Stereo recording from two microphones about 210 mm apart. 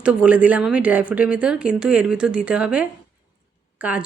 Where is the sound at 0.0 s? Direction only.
5° right (ahead or behind).